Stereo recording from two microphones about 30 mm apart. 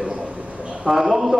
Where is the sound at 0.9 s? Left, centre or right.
Centre.